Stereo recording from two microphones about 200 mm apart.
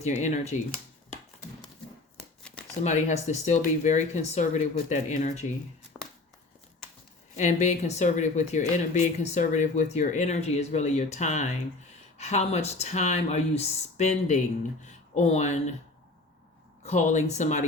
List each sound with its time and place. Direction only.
0.2 s speech: 35° left (ahead or behind)
2.8 s speech: 35° left (ahead or behind)
6.0 s a sound: centre (ahead or behind)
7.3 s speech: 35° left (ahead or behind)
16.8 s speech: 35° left (ahead or behind)